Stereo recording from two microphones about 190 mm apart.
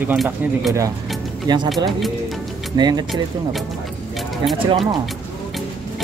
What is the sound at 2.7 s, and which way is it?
Speech, 20° right (ahead or behind).